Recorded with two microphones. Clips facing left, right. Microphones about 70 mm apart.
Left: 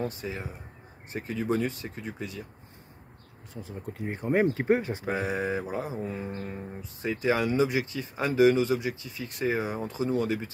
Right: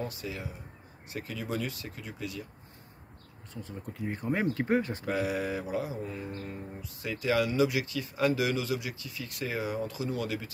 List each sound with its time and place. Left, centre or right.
0.2 s speech: left
3.6 s speech: left
6.1 s speech: left